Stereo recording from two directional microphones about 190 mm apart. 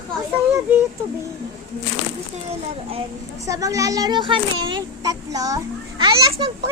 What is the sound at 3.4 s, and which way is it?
Speech, 15° right (ahead or behind).